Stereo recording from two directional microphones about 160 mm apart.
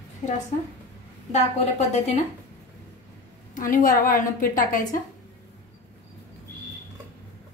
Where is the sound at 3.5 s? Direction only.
55° left (ahead or behind).